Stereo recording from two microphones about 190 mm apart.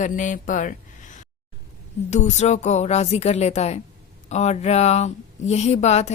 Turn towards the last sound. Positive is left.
turn(degrees=35)  # may be behind; listen again after turning